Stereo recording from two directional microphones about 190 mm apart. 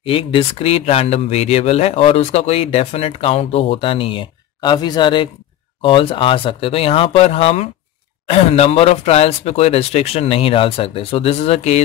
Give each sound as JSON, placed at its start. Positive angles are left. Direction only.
{"t": 0.0, "sound": "speech", "side_deg": 30}